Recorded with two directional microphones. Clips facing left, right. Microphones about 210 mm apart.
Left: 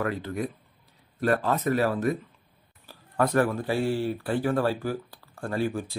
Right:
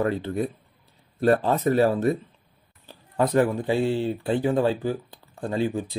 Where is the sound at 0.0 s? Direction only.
30° right (ahead or behind).